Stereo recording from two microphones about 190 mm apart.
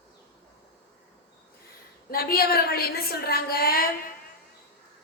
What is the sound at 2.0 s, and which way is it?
A woman's voice, 55° left (ahead or behind).